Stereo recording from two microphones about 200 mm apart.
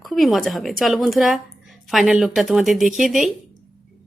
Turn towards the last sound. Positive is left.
turn(degrees=0)  # may be behind; listen again after turning